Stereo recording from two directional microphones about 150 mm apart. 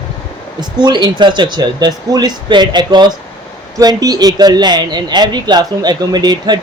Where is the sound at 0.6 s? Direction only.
30° right (ahead or behind).